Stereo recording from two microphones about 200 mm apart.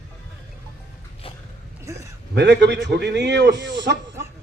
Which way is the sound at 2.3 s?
60° right (ahead or behind).